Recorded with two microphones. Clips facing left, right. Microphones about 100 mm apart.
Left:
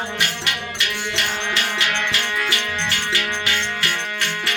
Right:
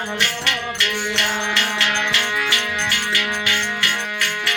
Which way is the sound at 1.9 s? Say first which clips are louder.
Right 1 dB; 15° right (ahead or behind).